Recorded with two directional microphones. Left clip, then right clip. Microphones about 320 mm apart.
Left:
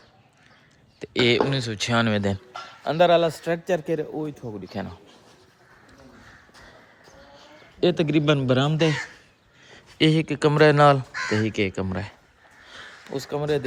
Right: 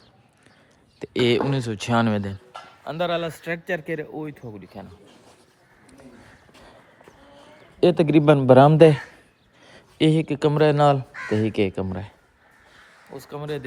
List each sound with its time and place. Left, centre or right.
0.9 s speech: centre
2.8 s speech: left; by 4.5 s centre
4.7 s speech: left
7.4 s a man's voice: centre
9.7 s speech: centre
13.3 s speech: centre